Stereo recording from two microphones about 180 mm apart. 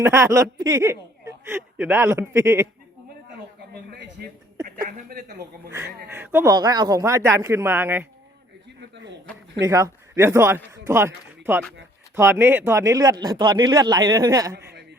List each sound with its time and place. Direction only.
0.0 s speech: 15° right (ahead or behind)
3.9 s a sound: 60° right (ahead or behind)
4.6 s a woman's voice: 50° right (ahead or behind)
6.1 s speech: 10° right (ahead or behind)
9.6 s a man's voice: 15° right (ahead or behind)